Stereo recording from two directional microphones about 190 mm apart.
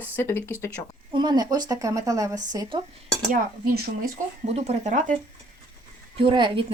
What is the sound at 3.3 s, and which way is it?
Speech, 50° right (ahead or behind).